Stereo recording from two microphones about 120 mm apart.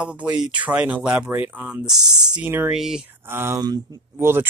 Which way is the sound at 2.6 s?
5° right (ahead or behind).